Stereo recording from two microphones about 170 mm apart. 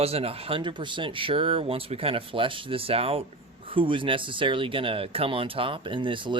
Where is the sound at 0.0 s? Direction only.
35° right (ahead or behind).